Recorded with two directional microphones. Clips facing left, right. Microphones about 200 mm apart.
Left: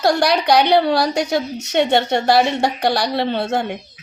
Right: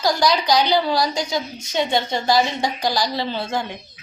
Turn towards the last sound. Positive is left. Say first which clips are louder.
# left 5 dB
turn(degrees=60)  # may be behind; listen again after turning